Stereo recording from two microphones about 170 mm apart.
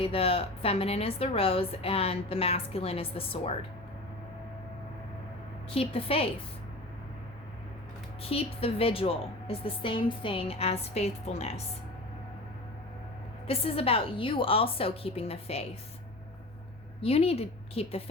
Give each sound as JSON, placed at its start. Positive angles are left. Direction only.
{"t": 0.0, "sound": "a woman's voice", "side_deg": 35}
{"t": 5.7, "sound": "a woman's voice", "side_deg": 35}
{"t": 8.2, "sound": "a woman's voice", "side_deg": 35}
{"t": 13.5, "sound": "a woman's voice", "side_deg": 35}
{"t": 17.0, "sound": "a woman's voice", "side_deg": 35}